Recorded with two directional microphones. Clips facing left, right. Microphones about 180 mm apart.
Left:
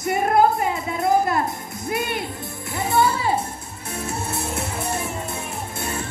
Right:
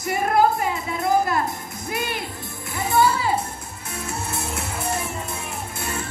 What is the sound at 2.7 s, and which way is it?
Music, 30° left (ahead or behind).